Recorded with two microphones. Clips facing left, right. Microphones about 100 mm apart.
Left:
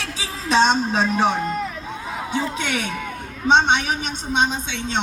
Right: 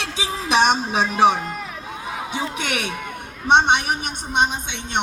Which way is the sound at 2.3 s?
15° right (ahead or behind).